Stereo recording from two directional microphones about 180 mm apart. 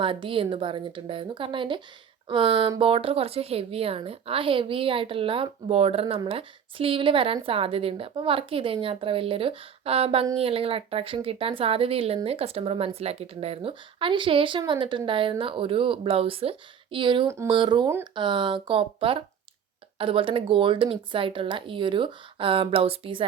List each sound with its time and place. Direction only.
0.0 s a woman's voice: 30° right (ahead or behind)
17.2 s speech: 15° right (ahead or behind)
17.5 s speech: 25° right (ahead or behind)
17.8 s speech: 15° right (ahead or behind)
18.1 s speech: 25° right (ahead or behind)